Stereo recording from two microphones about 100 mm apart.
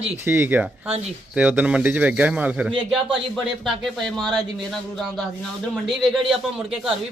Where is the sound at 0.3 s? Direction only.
15° right (ahead or behind).